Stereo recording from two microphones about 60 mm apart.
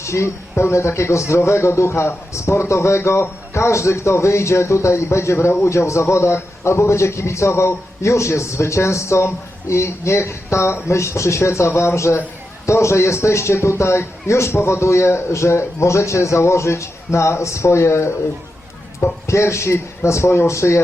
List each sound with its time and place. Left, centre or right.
0.0 s speech: left
19.3 s speech: left